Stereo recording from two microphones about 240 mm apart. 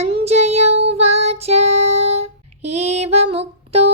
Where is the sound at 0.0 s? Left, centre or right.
Right.